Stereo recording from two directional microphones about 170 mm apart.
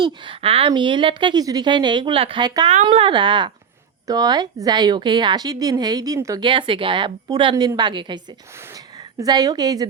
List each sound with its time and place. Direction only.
0.0 s a woman's voice: 35° right (ahead or behind)